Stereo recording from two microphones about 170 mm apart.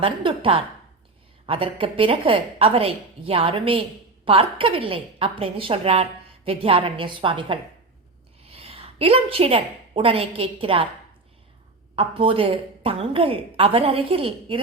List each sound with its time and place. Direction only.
0.0 s a woman's voice: 30° right (ahead or behind)
11.9 s a woman's voice: 30° right (ahead or behind)